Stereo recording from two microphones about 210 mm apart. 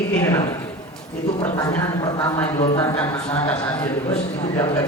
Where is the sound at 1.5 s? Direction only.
15° left (ahead or behind).